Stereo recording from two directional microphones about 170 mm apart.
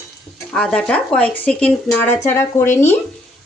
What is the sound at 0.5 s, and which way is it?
Speech, 5° left (ahead or behind).